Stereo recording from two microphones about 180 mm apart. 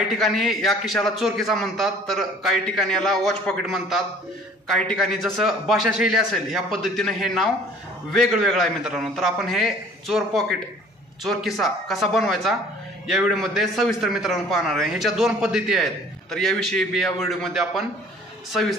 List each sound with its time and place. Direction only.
0.2 s a man's voice: centre (ahead or behind)